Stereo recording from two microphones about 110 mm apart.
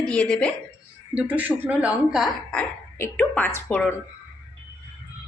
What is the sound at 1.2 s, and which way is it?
A woman's voice, 15° right (ahead or behind).